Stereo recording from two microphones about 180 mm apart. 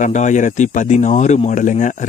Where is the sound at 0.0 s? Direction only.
45° left (ahead or behind).